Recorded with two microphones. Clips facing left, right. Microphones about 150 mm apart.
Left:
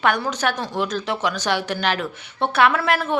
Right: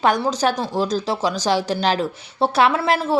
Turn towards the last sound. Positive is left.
turn(degrees=-35)  # may be behind; listen again after turning